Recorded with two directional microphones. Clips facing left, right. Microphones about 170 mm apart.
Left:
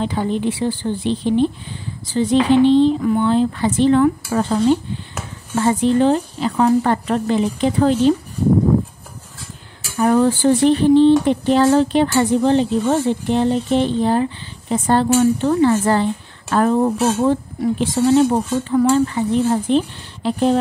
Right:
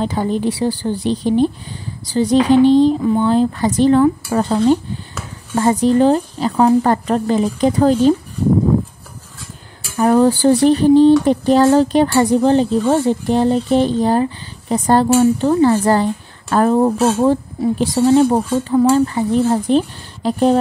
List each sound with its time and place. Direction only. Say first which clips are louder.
0.0 s speech: right 2 dB; 40° right (ahead or behind)
9.9 s a woman's voice: right 2 dB; 40° right (ahead or behind)